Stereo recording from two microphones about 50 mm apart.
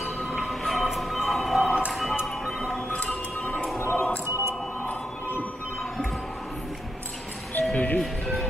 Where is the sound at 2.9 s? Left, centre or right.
Left.